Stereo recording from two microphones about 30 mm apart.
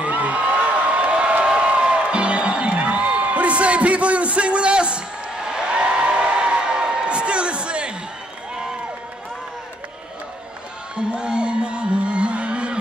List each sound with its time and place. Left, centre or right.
0.0 s a sound: right
2.0 s music: right
11.0 s music: right